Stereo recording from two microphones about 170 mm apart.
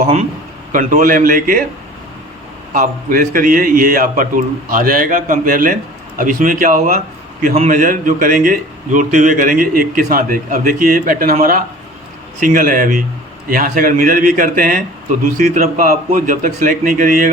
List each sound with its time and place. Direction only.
0.7 s a man's voice: 50° right (ahead or behind)
2.7 s a man's voice: 55° right (ahead or behind)